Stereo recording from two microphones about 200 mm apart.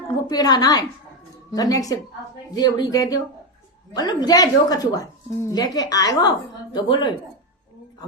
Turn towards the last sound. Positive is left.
turn(degrees=20)  # may be behind; listen again after turning